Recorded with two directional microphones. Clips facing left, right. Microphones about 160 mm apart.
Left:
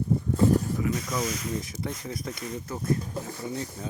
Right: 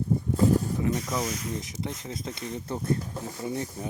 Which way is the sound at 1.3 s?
90° left.